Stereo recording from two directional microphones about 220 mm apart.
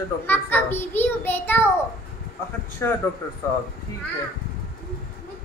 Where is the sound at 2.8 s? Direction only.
10° left (ahead or behind).